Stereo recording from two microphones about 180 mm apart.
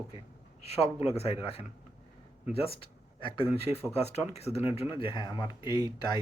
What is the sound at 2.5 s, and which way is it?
Speech, 30° left (ahead or behind).